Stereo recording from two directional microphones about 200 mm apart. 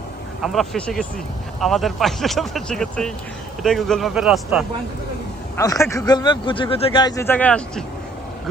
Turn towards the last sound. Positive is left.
turn(degrees=5)  # may be behind; listen again after turning